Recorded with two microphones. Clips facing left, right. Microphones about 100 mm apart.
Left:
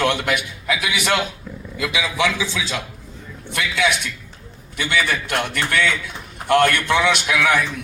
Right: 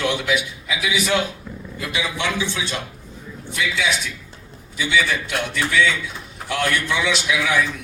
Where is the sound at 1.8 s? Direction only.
90° left.